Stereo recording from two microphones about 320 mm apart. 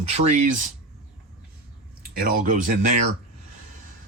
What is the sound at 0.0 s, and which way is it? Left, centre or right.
Speech, right.